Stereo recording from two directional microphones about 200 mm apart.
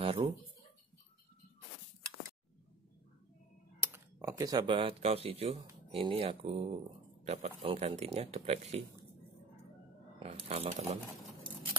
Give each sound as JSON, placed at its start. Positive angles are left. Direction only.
{"t": 0.0, "sound": "a sound", "side_deg": -25}
{"t": 3.9, "sound": "speech", "side_deg": -15}
{"t": 10.1, "sound": "speech", "side_deg": -30}